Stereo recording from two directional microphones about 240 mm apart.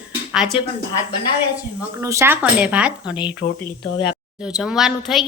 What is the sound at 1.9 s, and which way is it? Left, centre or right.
Speech, centre.